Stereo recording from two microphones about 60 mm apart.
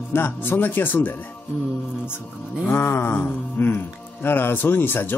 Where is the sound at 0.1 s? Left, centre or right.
Left.